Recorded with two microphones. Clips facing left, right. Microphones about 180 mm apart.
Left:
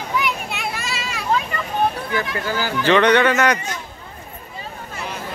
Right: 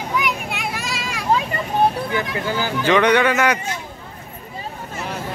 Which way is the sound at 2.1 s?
20° right (ahead or behind).